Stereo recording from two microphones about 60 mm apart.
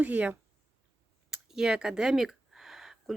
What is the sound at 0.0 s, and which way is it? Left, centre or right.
Speech, right.